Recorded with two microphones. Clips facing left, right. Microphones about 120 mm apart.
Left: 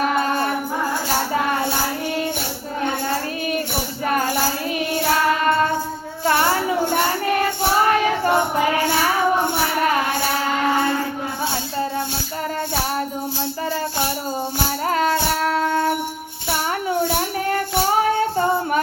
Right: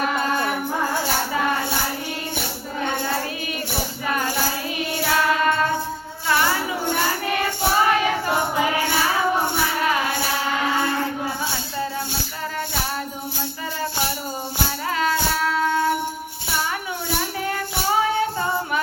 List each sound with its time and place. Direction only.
6.2 s tambourine: 40° left (ahead or behind)
7.9 s music: 45° left (ahead or behind)
14.8 s music: 40° left (ahead or behind)